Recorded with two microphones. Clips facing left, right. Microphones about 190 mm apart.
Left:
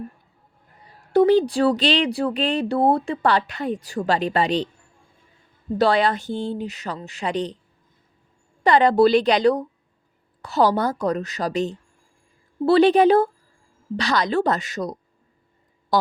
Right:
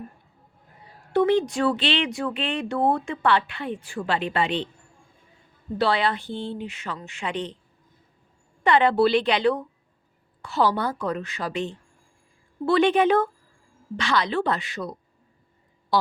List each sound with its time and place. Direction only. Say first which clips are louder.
1.1 s speech: left 5 dB; 35° left (ahead or behind)
5.7 s speech: left 4 dB; 45° left (ahead or behind)
8.6 s speech: left 3 dB; 40° left (ahead or behind)
15.9 s a sound: left 2 dB; 45° left (ahead or behind)